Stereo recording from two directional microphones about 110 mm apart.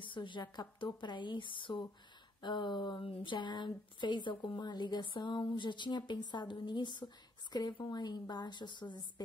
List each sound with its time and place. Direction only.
0.0 s a woman's voice: 45° left (ahead or behind)